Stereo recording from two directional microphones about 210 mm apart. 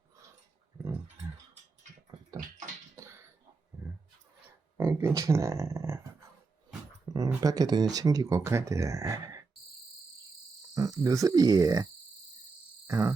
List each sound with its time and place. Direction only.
2.9 s cough: 15° right (ahead or behind)
4.4 s a sound: 10° right (ahead or behind)
7.0 s speech: 20° right (ahead or behind)
10.8 s speech: 15° right (ahead or behind)
12.9 s speech: 15° right (ahead or behind)